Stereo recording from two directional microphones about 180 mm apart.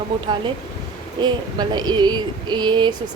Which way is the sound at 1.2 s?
25° right (ahead or behind).